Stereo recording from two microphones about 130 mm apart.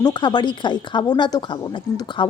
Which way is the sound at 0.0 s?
35° left (ahead or behind).